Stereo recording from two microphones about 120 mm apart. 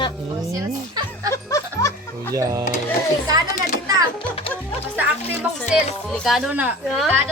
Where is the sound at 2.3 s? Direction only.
25° right (ahead or behind).